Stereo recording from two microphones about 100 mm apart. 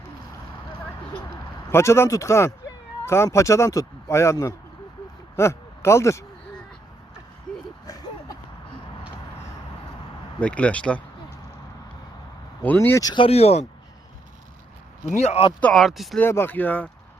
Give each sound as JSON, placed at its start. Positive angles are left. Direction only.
{"t": 1.7, "sound": "speech", "side_deg": 25}
{"t": 7.5, "sound": "a sound", "side_deg": 5}
{"t": 7.9, "sound": "a sound", "side_deg": 40}
{"t": 10.4, "sound": "speech", "side_deg": 15}
{"t": 12.6, "sound": "speech", "side_deg": 20}
{"t": 13.1, "sound": "speech", "side_deg": 80}
{"t": 15.2, "sound": "speech", "side_deg": 90}
{"t": 15.7, "sound": "speech", "side_deg": 0}
{"t": 16.1, "sound": "speech", "side_deg": 20}